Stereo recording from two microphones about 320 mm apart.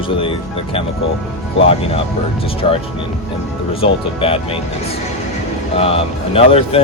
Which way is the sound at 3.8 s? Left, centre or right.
Centre.